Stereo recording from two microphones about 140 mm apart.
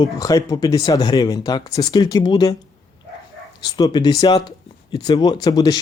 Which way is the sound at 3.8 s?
30° left (ahead or behind).